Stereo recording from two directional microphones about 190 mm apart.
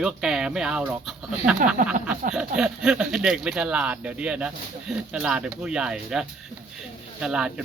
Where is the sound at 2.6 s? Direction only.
5° right (ahead or behind).